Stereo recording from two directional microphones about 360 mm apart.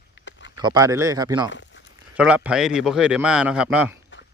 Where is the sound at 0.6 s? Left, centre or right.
Centre.